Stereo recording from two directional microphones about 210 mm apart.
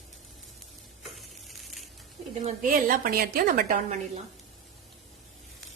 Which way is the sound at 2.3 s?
30° right (ahead or behind).